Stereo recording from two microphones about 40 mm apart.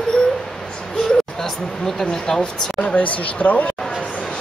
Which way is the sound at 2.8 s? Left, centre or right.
Left.